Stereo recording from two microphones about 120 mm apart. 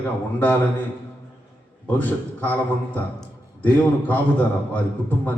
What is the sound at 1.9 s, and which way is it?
A man's voice, 15° left (ahead or behind).